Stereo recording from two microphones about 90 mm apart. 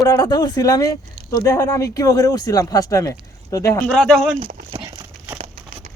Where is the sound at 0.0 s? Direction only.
40° left (ahead or behind).